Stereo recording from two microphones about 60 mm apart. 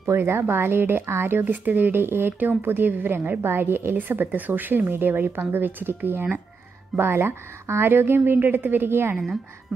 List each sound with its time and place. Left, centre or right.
0.0 s speech: right